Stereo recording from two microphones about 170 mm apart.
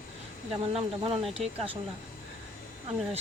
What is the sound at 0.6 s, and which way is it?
Speech, 35° right (ahead or behind).